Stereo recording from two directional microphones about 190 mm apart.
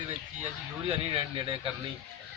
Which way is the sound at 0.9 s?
30° right (ahead or behind).